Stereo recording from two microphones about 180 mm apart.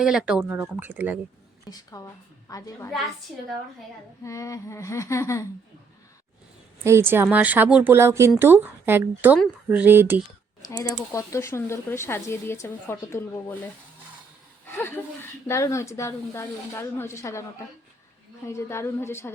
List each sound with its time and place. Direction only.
0.0 s speech: 5° right (ahead or behind)
1.7 s a woman's voice: 20° left (ahead or behind)
4.2 s speech: 15° left (ahead or behind)
6.8 s speech: 15° right (ahead or behind)
10.7 s speech: 15° left (ahead or behind)
14.7 s speech: 10° left (ahead or behind)
18.4 s speech: 15° left (ahead or behind)